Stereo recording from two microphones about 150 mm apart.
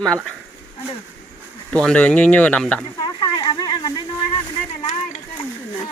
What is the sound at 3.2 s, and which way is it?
Speech, 30° left (ahead or behind).